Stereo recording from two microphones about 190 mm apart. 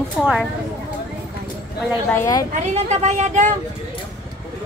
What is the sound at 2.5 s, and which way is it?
A woman's voice, 35° right (ahead or behind).